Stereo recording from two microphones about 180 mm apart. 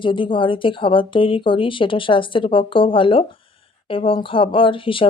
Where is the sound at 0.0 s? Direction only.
30° left (ahead or behind).